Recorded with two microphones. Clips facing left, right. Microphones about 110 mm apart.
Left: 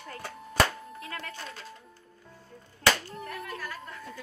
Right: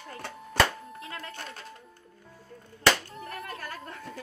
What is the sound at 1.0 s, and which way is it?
Music, 25° right (ahead or behind).